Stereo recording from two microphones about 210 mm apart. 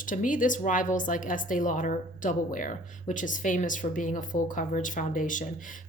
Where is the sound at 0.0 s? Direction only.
40° left (ahead or behind).